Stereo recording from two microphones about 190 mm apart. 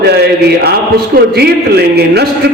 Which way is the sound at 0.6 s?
55° right (ahead or behind).